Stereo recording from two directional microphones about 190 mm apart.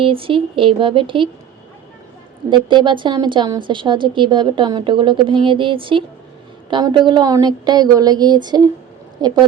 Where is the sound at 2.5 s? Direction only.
25° right (ahead or behind).